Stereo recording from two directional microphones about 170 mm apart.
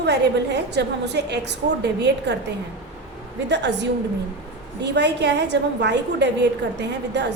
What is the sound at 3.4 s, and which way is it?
A woman's voice, 90° right.